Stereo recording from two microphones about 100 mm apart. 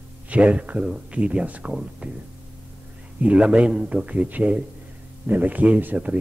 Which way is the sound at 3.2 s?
10° right (ahead or behind).